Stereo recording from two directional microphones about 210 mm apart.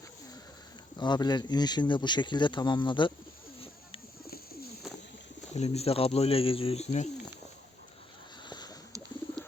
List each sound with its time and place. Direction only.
0.9 s a man's voice: 20° left (ahead or behind)
5.5 s a man's voice: 30° left (ahead or behind)
8.4 s a sound: 20° left (ahead or behind)